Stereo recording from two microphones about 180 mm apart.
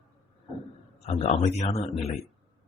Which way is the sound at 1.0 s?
30° left (ahead or behind).